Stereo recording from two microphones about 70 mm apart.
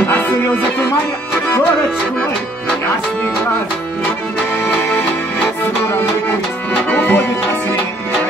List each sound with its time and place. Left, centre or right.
4.6 s music: left
7.0 s music: left